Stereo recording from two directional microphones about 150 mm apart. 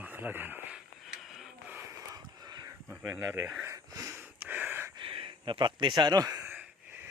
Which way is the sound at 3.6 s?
20° right (ahead or behind).